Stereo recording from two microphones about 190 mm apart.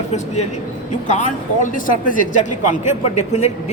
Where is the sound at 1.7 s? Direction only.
45° left (ahead or behind).